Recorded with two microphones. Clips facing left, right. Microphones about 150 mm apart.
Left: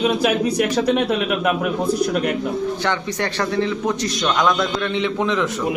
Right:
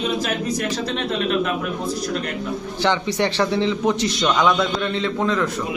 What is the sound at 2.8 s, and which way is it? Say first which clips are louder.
A man's voice: right 2 dB; 25° right (ahead or behind).